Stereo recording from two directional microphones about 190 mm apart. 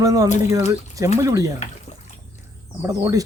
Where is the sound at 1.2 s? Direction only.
15° right (ahead or behind).